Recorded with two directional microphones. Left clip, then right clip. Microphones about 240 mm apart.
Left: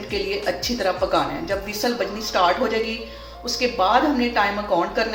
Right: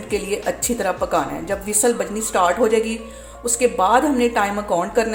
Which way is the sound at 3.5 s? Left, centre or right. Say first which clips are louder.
Right 2 dB; right.